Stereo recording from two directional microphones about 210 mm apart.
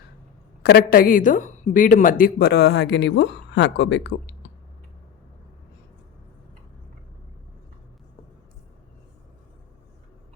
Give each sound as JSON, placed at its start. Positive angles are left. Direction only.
{"t": 0.6, "sound": "a woman's voice", "side_deg": 50}